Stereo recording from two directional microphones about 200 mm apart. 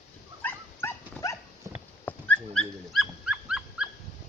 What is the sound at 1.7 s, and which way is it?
Horse, 15° right (ahead or behind).